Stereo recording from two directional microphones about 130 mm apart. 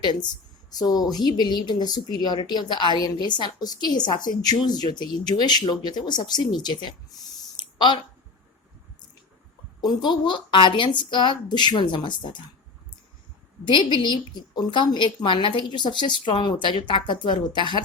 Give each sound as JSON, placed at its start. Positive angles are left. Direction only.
{"t": 0.0, "sound": "a woman's voice", "side_deg": 35}
{"t": 9.8, "sound": "a woman's voice", "side_deg": 35}
{"t": 13.7, "sound": "a woman's voice", "side_deg": 40}